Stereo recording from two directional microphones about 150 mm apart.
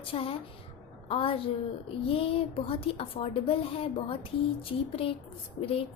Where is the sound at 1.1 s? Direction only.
40° left (ahead or behind).